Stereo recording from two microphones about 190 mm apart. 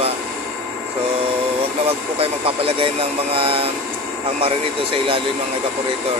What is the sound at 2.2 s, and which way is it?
Speech, 30° right (ahead or behind).